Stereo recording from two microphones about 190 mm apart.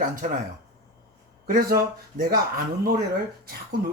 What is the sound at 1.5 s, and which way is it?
Speech, 50° right (ahead or behind).